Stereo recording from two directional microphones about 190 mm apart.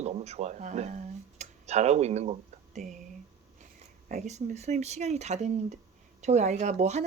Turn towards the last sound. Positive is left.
turn(degrees=-35)  # may be behind; listen again after turning